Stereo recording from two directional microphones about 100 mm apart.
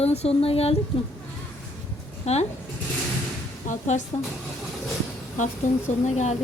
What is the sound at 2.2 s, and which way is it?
Speech, 90° left.